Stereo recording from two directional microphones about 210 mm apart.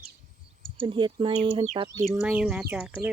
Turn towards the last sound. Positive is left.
turn(degrees=-5)  # may be behind; listen again after turning